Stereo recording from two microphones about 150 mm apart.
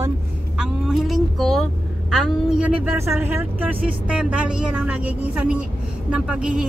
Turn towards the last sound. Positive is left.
turn(degrees=-5)  # may be behind; listen again after turning